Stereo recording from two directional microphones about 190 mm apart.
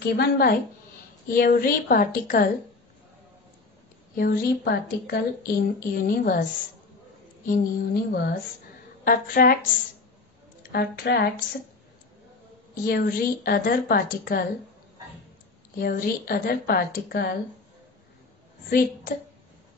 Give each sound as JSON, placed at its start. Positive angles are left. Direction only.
{"t": 0.0, "sound": "a woman's voice", "side_deg": 55}
{"t": 4.2, "sound": "a woman's voice", "side_deg": 50}
{"t": 7.4, "sound": "a woman's voice", "side_deg": 55}
{"t": 12.8, "sound": "a woman's voice", "side_deg": 50}
{"t": 15.8, "sound": "a woman's voice", "side_deg": 50}
{"t": 18.7, "sound": "a woman's voice", "side_deg": 50}